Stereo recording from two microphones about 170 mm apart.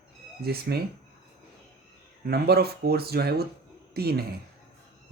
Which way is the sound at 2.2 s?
65° right (ahead or behind).